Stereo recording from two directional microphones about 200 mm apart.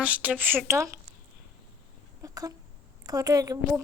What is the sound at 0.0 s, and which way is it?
Speech, 5° right (ahead or behind).